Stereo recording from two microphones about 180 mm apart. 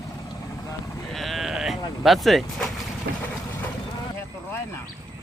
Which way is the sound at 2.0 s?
Centre (ahead or behind).